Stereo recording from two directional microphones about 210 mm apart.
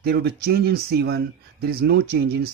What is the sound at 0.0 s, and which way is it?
Speech, 50° right (ahead or behind).